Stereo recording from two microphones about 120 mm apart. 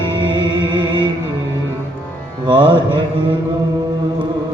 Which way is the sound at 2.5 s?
45° right (ahead or behind).